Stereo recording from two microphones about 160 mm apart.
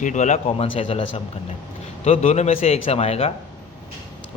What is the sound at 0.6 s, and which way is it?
A man's voice, 35° left (ahead or behind).